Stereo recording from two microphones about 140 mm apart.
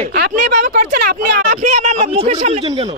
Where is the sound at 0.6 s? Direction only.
75° right (ahead or behind).